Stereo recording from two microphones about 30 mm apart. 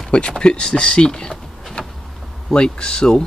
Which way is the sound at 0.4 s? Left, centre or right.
Left.